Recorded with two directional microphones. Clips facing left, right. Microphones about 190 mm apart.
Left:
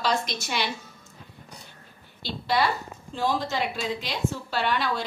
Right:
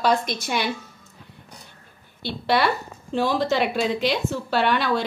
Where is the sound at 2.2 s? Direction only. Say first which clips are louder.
Right 4 dB; 70° right (ahead or behind).